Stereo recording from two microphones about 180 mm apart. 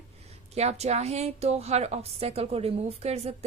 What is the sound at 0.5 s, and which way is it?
A woman's voice, 35° right (ahead or behind).